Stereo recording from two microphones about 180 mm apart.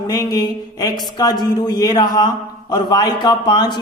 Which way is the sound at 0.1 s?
20° left (ahead or behind).